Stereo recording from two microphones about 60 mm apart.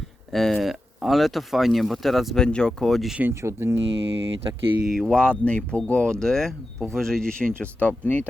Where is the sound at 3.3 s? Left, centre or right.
Right.